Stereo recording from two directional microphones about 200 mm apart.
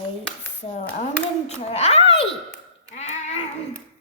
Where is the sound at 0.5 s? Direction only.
35° left (ahead or behind).